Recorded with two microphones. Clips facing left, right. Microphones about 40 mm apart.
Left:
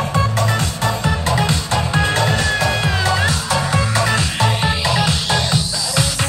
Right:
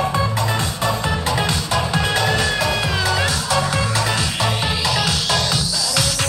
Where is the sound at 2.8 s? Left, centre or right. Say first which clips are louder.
Left 2 dB; centre.